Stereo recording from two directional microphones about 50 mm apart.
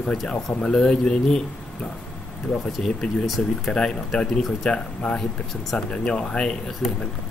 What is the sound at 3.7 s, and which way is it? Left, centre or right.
Speech, centre.